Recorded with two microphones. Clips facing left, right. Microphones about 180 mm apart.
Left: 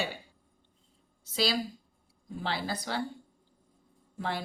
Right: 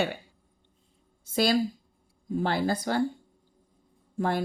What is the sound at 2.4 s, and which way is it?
Speech, 50° right (ahead or behind).